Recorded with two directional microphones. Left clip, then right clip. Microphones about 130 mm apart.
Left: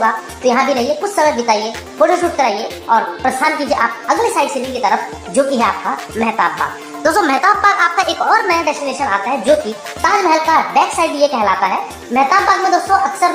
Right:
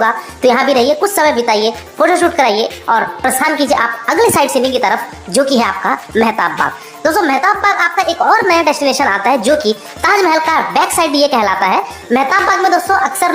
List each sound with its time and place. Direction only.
0.0 s a child's voice: 30° right (ahead or behind)
7.0 s a woman's voice: 10° right (ahead or behind)
8.3 s a child's voice: 25° right (ahead or behind)